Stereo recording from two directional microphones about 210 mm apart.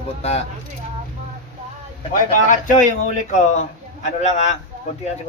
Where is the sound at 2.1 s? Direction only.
40° left (ahead or behind).